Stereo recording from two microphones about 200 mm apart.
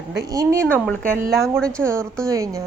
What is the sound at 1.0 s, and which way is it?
Speech, 45° right (ahead or behind).